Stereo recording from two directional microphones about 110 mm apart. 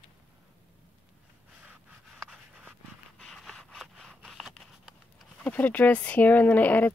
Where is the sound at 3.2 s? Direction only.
5° left (ahead or behind).